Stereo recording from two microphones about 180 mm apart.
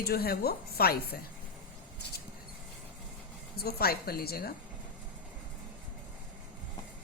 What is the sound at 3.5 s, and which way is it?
A woman's voice, 60° left (ahead or behind).